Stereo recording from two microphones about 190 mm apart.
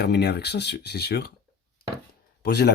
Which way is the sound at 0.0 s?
60° left (ahead or behind).